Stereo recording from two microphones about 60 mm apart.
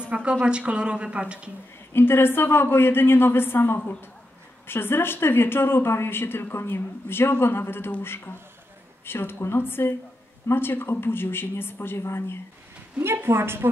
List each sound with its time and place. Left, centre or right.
0.1 s a woman's voice: right
2.0 s speech: left
13.0 s a woman's voice: right